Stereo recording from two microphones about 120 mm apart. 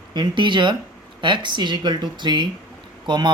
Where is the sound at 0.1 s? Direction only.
40° right (ahead or behind).